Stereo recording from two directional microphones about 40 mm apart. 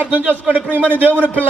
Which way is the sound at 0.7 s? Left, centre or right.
Right.